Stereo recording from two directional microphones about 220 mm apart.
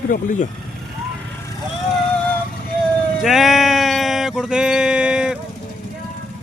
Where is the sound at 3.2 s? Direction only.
Centre (ahead or behind).